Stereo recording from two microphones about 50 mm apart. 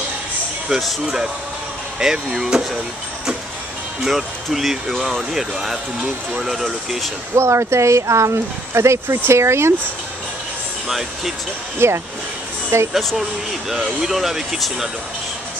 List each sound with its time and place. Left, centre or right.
0.7 s speech: centre
4.0 s speech: centre
7.3 s speech: right
10.9 s speech: centre
11.8 s speech: right
13.7 s speech: centre